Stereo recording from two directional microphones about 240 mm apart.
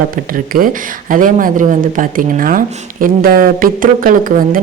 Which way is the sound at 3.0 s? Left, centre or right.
Right.